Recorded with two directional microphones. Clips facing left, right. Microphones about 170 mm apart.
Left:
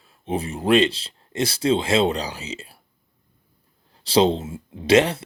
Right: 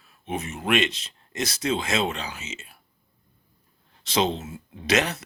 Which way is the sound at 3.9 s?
30° left (ahead or behind).